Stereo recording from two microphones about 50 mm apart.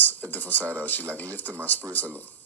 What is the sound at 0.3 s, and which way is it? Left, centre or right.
Speech, left.